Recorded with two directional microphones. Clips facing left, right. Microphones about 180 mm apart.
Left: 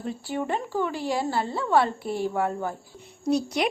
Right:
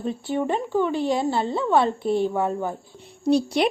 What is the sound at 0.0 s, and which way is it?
A woman's voice, 20° right (ahead or behind).